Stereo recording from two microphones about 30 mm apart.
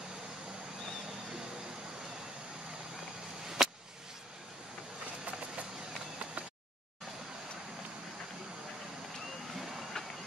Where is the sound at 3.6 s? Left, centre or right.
Centre.